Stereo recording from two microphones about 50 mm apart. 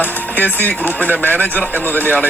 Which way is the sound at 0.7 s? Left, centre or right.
Left.